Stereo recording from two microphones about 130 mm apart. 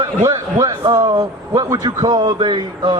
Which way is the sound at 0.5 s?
35° right (ahead or behind).